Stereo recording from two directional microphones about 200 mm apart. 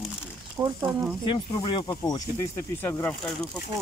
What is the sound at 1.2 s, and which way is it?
Speech, 25° left (ahead or behind).